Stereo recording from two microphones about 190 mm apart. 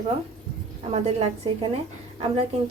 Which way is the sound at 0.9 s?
35° right (ahead or behind).